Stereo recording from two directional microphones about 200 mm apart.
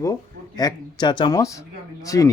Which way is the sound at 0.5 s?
20° left (ahead or behind).